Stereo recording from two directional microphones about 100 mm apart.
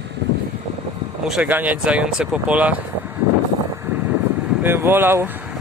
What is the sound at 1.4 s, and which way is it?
Speech, 15° right (ahead or behind).